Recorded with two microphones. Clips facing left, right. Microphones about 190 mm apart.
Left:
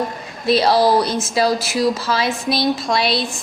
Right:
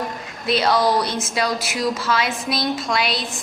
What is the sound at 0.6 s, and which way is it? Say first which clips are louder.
A woman's voice: left 3 dB; 30° left (ahead or behind).